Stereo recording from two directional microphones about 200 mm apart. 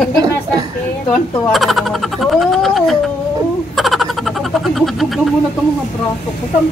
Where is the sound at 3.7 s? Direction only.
Centre (ahead or behind).